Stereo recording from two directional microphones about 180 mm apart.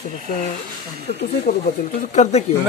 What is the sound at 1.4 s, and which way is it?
Speech, 45° left (ahead or behind).